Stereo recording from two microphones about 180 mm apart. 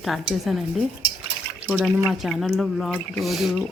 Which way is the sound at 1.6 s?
5° left (ahead or behind).